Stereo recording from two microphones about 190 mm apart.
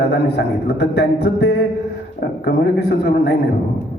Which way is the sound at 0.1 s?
60° left (ahead or behind).